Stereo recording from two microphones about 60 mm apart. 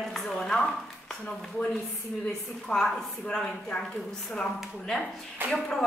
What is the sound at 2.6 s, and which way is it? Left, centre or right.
Speech, centre.